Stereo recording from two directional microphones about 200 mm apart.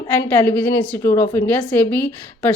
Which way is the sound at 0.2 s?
10° left (ahead or behind).